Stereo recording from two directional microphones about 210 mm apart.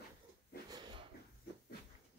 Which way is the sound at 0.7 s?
20° right (ahead or behind).